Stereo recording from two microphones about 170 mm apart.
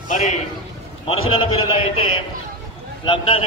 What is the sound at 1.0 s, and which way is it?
Speech, 35° left (ahead or behind).